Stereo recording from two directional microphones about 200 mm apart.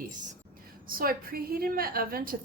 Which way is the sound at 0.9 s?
45° right (ahead or behind).